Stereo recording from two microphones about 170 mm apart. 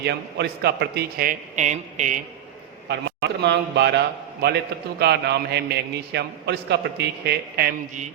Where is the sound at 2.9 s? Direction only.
85° right.